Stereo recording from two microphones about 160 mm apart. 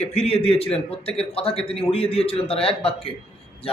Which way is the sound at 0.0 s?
40° left (ahead or behind).